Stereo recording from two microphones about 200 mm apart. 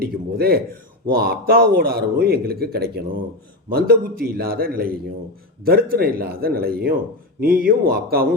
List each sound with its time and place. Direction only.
0.0 s a man's voice: 50° right (ahead or behind)